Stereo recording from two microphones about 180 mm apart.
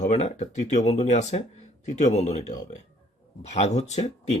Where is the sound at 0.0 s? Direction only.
40° left (ahead or behind).